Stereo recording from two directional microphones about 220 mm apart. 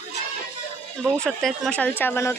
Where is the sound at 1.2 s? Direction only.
Centre (ahead or behind).